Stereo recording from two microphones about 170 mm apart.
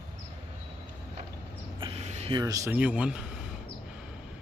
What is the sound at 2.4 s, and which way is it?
Speech, 20° right (ahead or behind).